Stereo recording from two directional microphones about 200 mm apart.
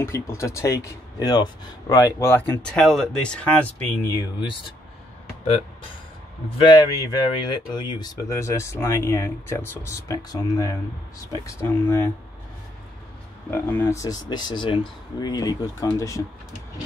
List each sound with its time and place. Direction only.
0.0 s speech: 15° left (ahead or behind)
6.6 s speech: 20° left (ahead or behind)
13.5 s speech: 10° left (ahead or behind)